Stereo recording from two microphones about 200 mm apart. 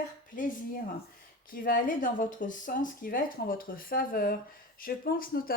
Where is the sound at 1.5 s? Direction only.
45° left (ahead or behind).